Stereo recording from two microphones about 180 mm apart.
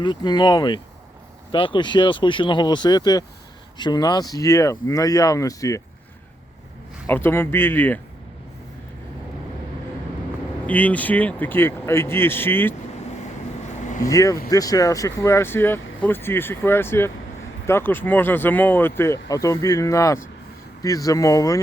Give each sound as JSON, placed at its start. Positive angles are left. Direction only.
{"t": 0.0, "sound": "speech", "side_deg": 25}
{"t": 7.1, "sound": "speech", "side_deg": 10}
{"t": 10.7, "sound": "speech", "side_deg": 10}
{"t": 13.8, "sound": "vehicle", "side_deg": 45}
{"t": 14.1, "sound": "speech", "side_deg": 20}